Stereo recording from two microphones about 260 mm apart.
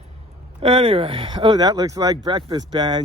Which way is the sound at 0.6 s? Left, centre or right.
Right.